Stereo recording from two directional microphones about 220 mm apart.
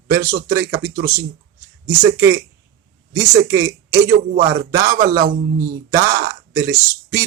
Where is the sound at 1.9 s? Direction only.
10° right (ahead or behind).